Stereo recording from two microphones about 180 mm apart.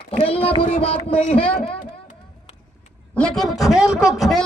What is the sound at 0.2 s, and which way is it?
A man's voice, 30° left (ahead or behind).